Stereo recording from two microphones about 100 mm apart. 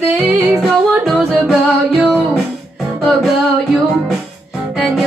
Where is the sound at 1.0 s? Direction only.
Centre (ahead or behind).